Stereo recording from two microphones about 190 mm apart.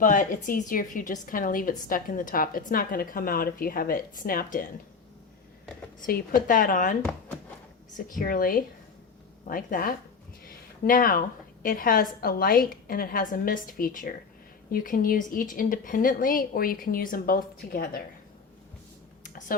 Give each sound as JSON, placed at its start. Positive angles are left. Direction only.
{"t": 0.0, "sound": "a woman's voice", "side_deg": 45}
{"t": 6.0, "sound": "a woman's voice", "side_deg": 45}
{"t": 8.2, "sound": "a woman's voice", "side_deg": 50}
{"t": 10.4, "sound": "a sound", "side_deg": 45}
{"t": 11.6, "sound": "a woman's voice", "side_deg": 45}